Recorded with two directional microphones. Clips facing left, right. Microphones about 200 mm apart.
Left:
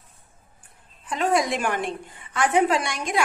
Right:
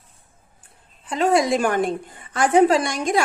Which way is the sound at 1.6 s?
40° right (ahead or behind).